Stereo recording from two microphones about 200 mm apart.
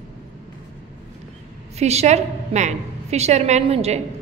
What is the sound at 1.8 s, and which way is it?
A woman's voice, 30° right (ahead or behind).